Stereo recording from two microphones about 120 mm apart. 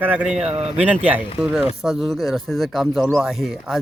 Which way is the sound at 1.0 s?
10° right (ahead or behind).